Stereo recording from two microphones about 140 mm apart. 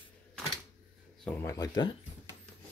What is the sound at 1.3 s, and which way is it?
Speech, 25° left (ahead or behind).